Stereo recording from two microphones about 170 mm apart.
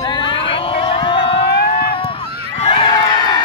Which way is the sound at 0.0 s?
25° left (ahead or behind).